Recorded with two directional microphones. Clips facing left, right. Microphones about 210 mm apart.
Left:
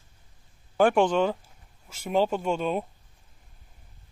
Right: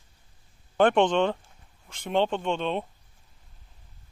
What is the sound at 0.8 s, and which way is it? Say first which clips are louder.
Speech: even; 5° left (ahead or behind).